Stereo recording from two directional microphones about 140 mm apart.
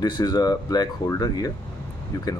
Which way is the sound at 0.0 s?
30° left (ahead or behind).